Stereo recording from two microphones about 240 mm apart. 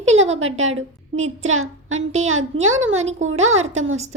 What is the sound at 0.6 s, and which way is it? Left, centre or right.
A woman's voice, right.